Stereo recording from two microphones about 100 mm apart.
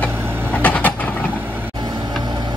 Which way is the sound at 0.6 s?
15° left (ahead or behind).